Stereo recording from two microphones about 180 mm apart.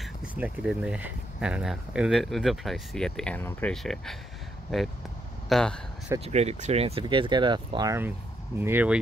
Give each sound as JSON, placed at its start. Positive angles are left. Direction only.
{"t": 0.0, "sound": "speech", "side_deg": -5}
{"t": 5.5, "sound": "speech", "side_deg": 5}
{"t": 6.2, "sound": "speech", "side_deg": -40}